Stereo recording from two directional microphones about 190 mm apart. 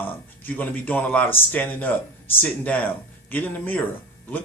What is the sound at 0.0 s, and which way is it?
Speech, 10° left (ahead or behind).